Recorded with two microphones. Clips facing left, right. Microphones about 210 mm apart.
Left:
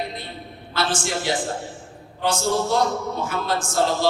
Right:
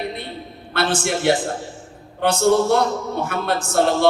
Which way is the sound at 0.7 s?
60° right (ahead or behind).